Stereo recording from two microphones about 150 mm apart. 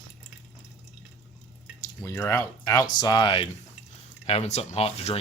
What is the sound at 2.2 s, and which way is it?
Speech, 20° left (ahead or behind).